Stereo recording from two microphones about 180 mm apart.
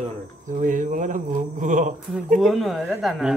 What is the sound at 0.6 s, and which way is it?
Speech, 45° right (ahead or behind).